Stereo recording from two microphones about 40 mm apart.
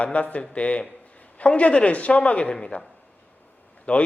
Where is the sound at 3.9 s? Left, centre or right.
Left.